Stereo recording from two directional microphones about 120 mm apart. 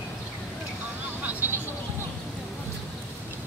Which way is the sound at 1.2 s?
15° right (ahead or behind).